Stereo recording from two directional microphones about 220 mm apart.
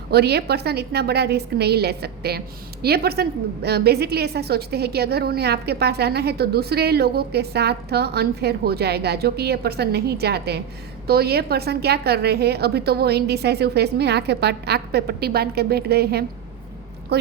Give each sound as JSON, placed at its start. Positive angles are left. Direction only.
{"t": 0.1, "sound": "a woman's voice", "side_deg": -45}